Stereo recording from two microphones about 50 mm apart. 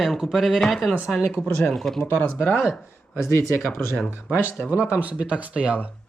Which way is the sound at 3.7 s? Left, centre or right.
Left.